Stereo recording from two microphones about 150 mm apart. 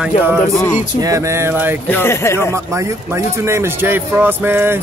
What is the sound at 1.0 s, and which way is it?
Speech, 20° right (ahead or behind).